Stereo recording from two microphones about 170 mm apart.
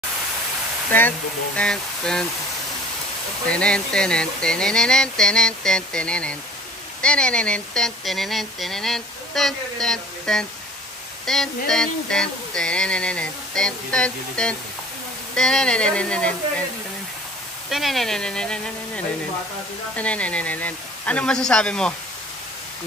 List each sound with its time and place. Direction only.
1.6 s speech: 5° left (ahead or behind)
3.4 s speech: 5° left (ahead or behind)
17.6 s speech: centre (ahead or behind)